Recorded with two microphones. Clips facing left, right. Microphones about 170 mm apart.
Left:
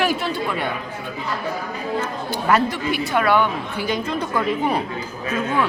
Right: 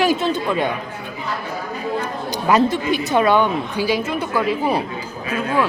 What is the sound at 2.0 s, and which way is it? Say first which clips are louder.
Speech: right 1 dB; 15° right (ahead or behind).